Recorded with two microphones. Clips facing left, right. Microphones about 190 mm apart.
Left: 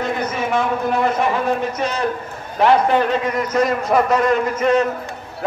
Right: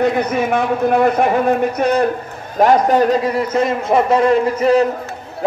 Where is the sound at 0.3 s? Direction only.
55° right (ahead or behind).